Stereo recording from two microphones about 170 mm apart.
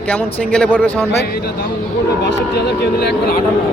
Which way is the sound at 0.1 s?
5° left (ahead or behind).